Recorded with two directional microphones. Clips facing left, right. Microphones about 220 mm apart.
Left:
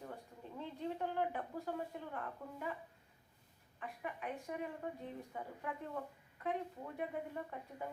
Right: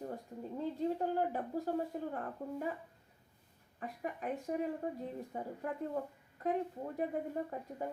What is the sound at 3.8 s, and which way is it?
A woman's voice, 40° right (ahead or behind).